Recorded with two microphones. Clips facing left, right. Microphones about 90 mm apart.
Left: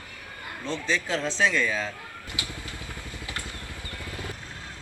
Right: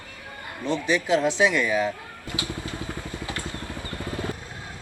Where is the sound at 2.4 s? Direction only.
25° right (ahead or behind).